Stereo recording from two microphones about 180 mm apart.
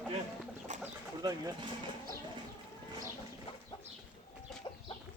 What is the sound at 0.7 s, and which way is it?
Bird, 40° right (ahead or behind).